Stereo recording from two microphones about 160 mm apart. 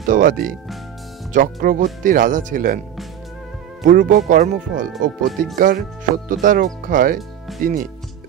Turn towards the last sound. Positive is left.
turn(degrees=-60)  # may be behind; listen again after turning